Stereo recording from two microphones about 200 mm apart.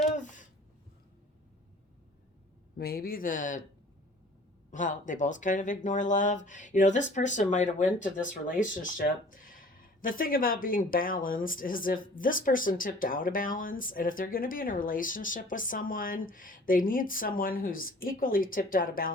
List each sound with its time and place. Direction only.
0.1 s a sound: 40° left (ahead or behind)
2.7 s speech: 50° left (ahead or behind)
4.7 s speech: 40° left (ahead or behind)